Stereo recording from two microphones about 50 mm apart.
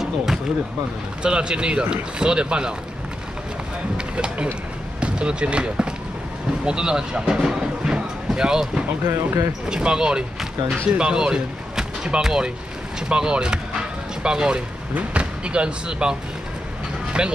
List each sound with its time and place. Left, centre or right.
0.0 s a sound: centre
1.2 s speech: centre
3.9 s speech: right
9.0 s speech: right
9.7 s speech: centre
17.2 s speech: centre